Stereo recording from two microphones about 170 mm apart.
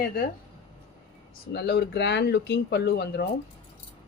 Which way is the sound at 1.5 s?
75° left (ahead or behind).